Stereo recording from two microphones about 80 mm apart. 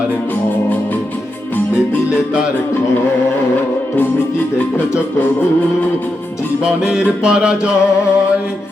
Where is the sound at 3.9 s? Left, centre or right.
Left.